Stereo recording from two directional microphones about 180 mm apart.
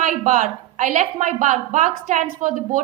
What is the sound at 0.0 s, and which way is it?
A woman's voice, 45° right (ahead or behind).